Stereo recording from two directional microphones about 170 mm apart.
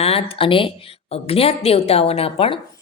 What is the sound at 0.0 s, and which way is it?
A woman's voice, 35° left (ahead or behind).